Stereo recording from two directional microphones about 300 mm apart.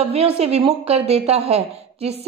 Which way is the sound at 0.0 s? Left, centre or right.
Centre.